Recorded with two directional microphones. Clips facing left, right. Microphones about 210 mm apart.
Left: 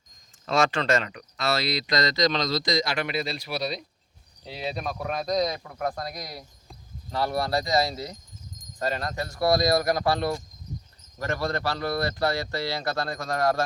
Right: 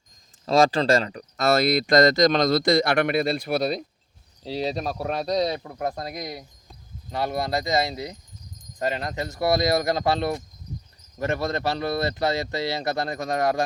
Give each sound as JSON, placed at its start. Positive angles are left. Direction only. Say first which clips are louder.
{"t": 0.4, "sound": "speech", "louder": "right 5 dB", "side_deg": -35}
{"t": 4.4, "sound": "speech", "louder": "right 5 dB", "side_deg": -35}